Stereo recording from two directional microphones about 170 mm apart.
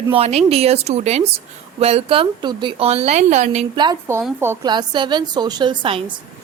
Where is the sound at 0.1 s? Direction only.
35° right (ahead or behind).